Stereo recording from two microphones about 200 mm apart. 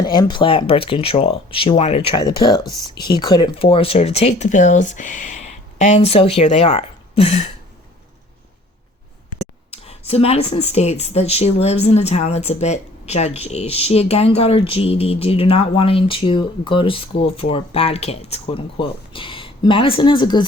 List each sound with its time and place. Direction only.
0.0 s a woman's voice: 20° left (ahead or behind)
9.4 s whispering: 30° left (ahead or behind)
10.1 s a woman's voice: 30° left (ahead or behind)